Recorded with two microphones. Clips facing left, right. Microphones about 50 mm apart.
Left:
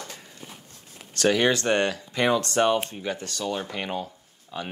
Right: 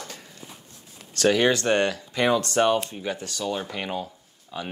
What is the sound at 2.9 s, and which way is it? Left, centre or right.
Speech, centre.